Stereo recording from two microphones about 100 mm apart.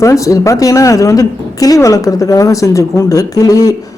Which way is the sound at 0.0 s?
30° left (ahead or behind).